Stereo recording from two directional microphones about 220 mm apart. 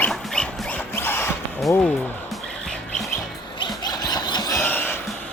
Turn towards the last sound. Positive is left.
turn(degrees=10)  # may be behind; listen again after turning